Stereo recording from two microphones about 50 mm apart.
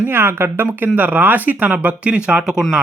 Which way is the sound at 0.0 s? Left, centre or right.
Right.